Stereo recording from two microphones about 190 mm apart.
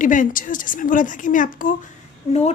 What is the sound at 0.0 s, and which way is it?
A woman's voice, 45° left (ahead or behind).